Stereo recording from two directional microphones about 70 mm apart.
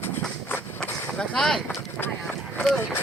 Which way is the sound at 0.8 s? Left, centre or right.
Centre.